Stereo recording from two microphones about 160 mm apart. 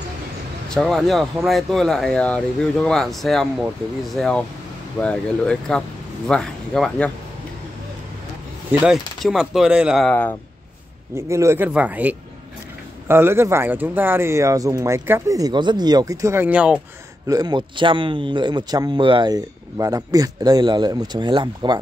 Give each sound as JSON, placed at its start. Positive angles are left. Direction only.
{"t": 0.7, "sound": "speech", "side_deg": 5}
{"t": 8.8, "sound": "speech", "side_deg": 0}
{"t": 10.0, "sound": "speech", "side_deg": 10}
{"t": 11.1, "sound": "speech", "side_deg": -20}
{"t": 17.3, "sound": "a man's voice", "side_deg": -25}